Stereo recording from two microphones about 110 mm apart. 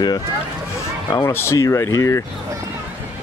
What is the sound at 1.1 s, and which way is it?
Speech, 25° left (ahead or behind).